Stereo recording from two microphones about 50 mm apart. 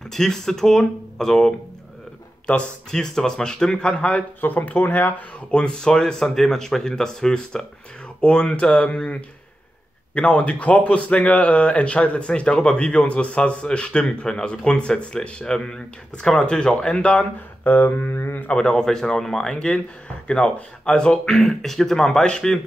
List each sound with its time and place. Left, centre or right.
0.1 s a man's voice: centre
4.4 s speech: left
5.5 s a man's voice: centre
17.6 s a sound: left
18.5 s a man's voice: centre
21.4 s a man's voice: centre